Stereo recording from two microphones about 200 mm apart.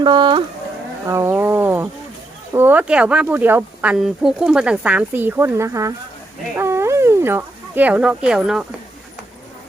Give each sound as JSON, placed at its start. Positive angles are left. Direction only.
{"t": 0.0, "sound": "speech", "side_deg": -25}
{"t": 1.0, "sound": "speech", "side_deg": -10}